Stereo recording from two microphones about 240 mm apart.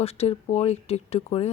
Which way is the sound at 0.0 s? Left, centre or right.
Left.